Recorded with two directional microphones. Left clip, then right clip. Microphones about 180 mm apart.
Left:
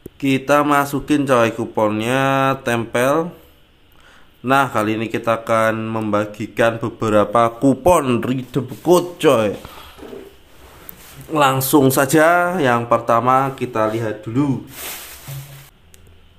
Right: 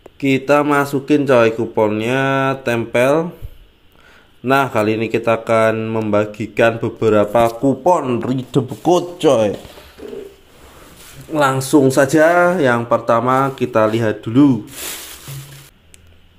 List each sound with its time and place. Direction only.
0.2 s a man's voice: 5° right (ahead or behind)
4.5 s speech: 10° right (ahead or behind)
7.3 s a man's voice: 20° left (ahead or behind)
8.4 s speech: 10° right (ahead or behind)
9.2 s a man's voice: centre (ahead or behind)
11.3 s a man's voice: centre (ahead or behind)
12.4 s speech: 5° right (ahead or behind)
13.6 s speech: 30° right (ahead or behind)